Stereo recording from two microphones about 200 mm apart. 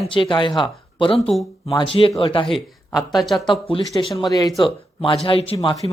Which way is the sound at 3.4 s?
25° left (ahead or behind).